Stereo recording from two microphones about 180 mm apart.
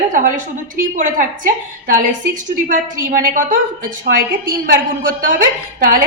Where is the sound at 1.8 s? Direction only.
50° right (ahead or behind).